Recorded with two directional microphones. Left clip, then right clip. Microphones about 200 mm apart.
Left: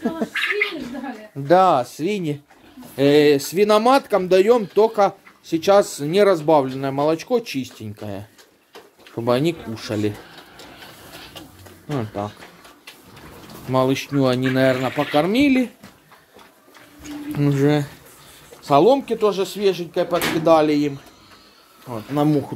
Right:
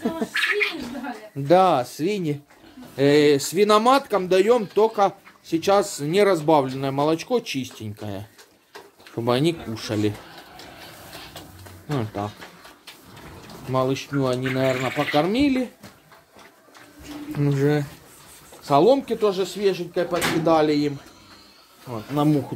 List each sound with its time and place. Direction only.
1.5 s speech: 10° left (ahead or behind)
3.9 s speech: 15° left (ahead or behind)
11.9 s speech: centre (ahead or behind)
13.7 s speech: 25° left (ahead or behind)
17.3 s speech: 30° left (ahead or behind)
18.6 s speech: 15° left (ahead or behind)
21.9 s speech: 15° left (ahead or behind)